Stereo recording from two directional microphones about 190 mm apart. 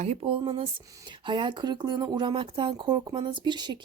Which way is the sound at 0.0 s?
30° right (ahead or behind).